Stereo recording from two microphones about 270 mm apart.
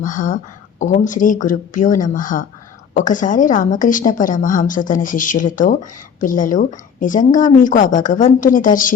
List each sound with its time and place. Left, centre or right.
0.0 s a woman's voice: left